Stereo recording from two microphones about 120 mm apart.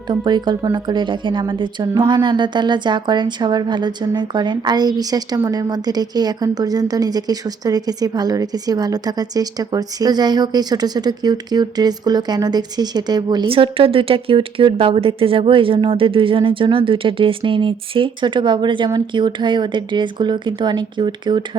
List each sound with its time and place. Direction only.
0.1 s a woman's voice: 40° right (ahead or behind)
13.5 s a woman's voice: 50° right (ahead or behind)